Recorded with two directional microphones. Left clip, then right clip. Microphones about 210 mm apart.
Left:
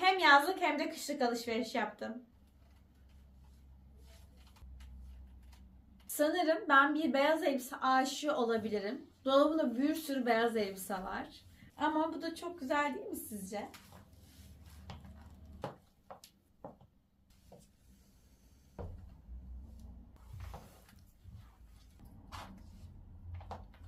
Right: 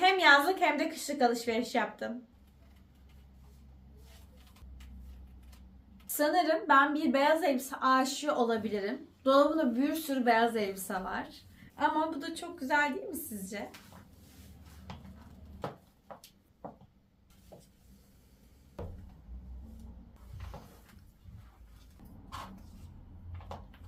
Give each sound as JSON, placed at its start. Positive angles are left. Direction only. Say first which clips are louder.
{"t": 0.0, "sound": "a woman's voice", "louder": "right 3 dB", "side_deg": -15}
{"t": 6.1, "sound": "a woman's voice", "louder": "right 4 dB", "side_deg": -15}